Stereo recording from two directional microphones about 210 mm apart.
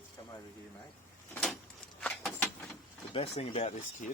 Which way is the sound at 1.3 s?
5° left (ahead or behind).